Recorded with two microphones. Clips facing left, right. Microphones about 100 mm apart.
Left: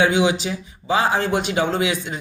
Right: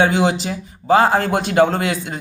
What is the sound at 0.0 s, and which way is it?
A man's voice, 35° right (ahead or behind).